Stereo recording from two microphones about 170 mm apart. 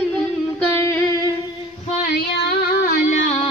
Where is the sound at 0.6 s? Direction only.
15° left (ahead or behind).